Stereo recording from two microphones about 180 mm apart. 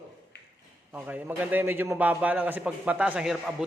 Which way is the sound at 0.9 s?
10° right (ahead or behind).